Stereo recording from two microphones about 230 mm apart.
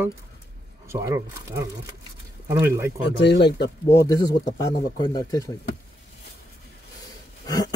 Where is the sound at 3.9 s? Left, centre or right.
Centre.